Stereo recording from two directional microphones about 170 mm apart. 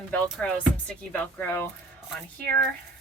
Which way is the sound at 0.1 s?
5° left (ahead or behind).